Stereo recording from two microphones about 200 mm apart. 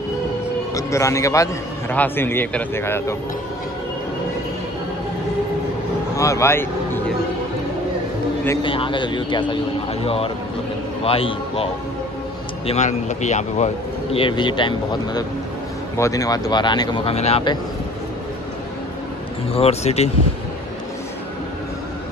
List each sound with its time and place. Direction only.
0.7 s a man's voice: 15° left (ahead or behind)
6.1 s a man's voice: 15° left (ahead or behind)
8.6 s speech: 25° left (ahead or behind)
14.1 s speech: 25° left (ahead or behind)
19.5 s speech: 30° left (ahead or behind)